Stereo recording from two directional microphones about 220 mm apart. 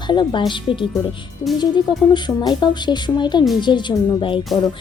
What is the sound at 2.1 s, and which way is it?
Speech, 20° left (ahead or behind).